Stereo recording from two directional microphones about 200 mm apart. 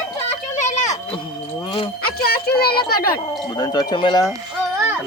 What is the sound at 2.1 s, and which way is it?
Speech, 50° left (ahead or behind).